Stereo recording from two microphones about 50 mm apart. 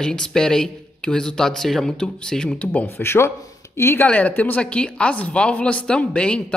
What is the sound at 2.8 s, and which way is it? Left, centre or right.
Speech, left.